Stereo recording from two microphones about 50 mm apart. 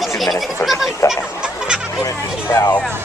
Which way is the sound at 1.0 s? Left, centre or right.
Left.